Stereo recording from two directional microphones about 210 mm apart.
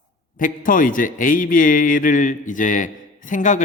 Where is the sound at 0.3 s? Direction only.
40° left (ahead or behind).